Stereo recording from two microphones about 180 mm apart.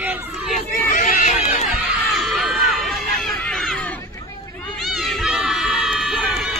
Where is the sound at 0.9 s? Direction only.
45° left (ahead or behind).